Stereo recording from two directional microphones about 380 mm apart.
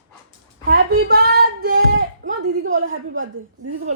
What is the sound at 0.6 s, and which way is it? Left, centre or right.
A woman's voice, right.